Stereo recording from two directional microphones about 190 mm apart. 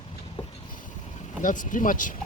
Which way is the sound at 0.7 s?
45° left (ahead or behind).